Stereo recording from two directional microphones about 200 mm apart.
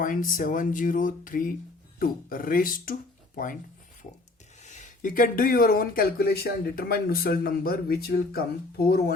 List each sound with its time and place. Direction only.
0.0 s speech: 45° left (ahead or behind)
4.6 s speech: 35° left (ahead or behind)